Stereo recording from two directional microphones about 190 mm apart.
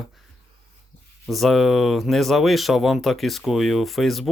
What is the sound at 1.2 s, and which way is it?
Speech, centre (ahead or behind).